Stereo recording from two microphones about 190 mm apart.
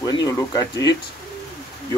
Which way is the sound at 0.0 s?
20° left (ahead or behind).